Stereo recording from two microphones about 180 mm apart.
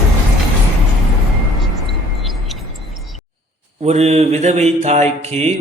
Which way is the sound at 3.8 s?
35° right (ahead or behind).